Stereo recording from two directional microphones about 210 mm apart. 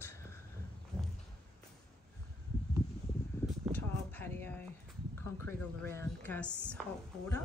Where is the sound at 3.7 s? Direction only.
10° left (ahead or behind).